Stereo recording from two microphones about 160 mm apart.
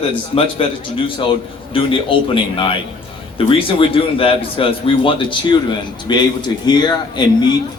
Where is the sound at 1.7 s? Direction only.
35° left (ahead or behind).